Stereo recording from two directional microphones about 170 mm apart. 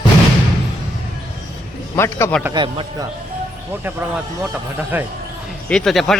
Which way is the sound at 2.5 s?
30° right (ahead or behind).